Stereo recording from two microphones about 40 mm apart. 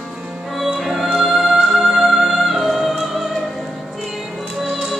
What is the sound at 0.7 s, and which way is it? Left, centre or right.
Music, centre.